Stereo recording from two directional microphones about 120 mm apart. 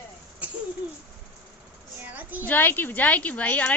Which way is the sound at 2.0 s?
15° right (ahead or behind).